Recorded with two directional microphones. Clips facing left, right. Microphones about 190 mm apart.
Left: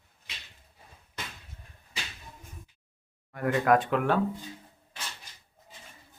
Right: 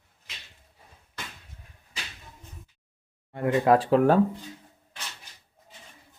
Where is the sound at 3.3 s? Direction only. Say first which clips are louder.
Right 3 dB; 25° right (ahead or behind).